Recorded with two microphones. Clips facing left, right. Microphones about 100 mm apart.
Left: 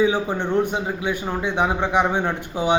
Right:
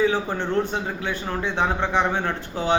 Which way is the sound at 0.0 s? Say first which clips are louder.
Left 2 dB; 15° left (ahead or behind).